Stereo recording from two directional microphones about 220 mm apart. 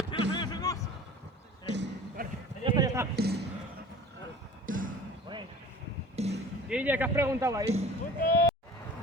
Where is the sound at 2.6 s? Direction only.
20° right (ahead or behind).